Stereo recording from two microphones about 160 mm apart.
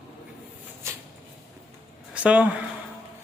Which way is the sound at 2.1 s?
10° right (ahead or behind).